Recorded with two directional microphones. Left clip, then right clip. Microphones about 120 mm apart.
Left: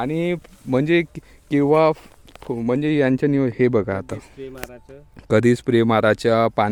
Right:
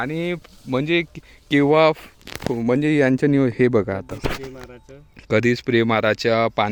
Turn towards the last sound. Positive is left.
turn(degrees=35)  # may be behind; listen again after turning